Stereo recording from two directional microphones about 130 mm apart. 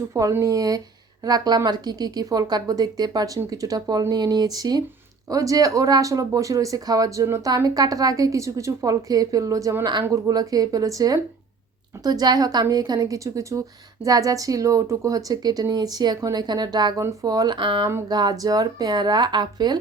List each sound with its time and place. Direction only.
0.1 s a woman's voice: 25° right (ahead or behind)